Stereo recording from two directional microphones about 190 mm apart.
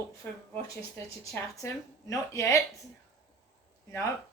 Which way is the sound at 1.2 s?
15° left (ahead or behind).